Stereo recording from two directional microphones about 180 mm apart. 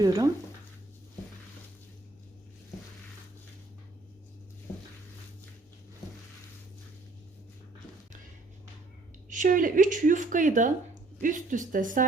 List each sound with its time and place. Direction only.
0.0 s speech: 20° right (ahead or behind)
9.3 s speech: 45° right (ahead or behind)